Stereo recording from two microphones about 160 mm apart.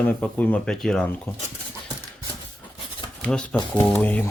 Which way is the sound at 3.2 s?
10° left (ahead or behind).